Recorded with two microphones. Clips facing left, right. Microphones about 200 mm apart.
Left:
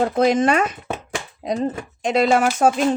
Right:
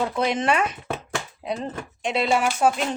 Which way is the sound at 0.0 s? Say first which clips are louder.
Left 7 dB; 45° left (ahead or behind).